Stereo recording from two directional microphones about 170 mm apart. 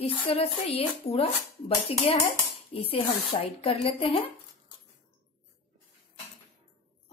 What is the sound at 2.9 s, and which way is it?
Dishes, 35° left (ahead or behind).